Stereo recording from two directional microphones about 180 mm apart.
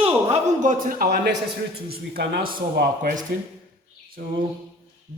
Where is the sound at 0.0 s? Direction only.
30° right (ahead or behind).